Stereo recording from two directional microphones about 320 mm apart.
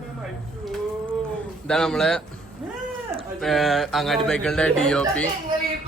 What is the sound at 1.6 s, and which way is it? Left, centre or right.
Speech, centre.